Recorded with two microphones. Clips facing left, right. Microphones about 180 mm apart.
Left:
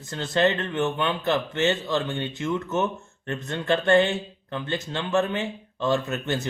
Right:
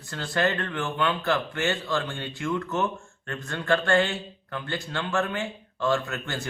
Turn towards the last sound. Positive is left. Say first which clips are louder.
# left 4 dB
turn(degrees=20)  # may be behind; listen again after turning